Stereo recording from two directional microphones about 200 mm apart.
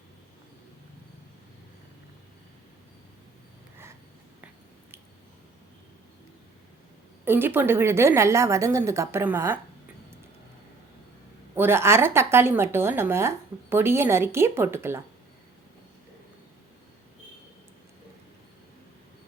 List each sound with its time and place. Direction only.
7.3 s a woman's voice: 10° right (ahead or behind)
11.5 s a woman's voice: 10° right (ahead or behind)